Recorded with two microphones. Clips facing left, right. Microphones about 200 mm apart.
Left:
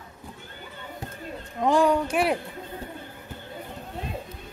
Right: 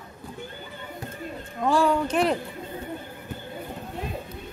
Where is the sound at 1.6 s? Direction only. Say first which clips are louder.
Left 1 dB; 15° left (ahead or behind).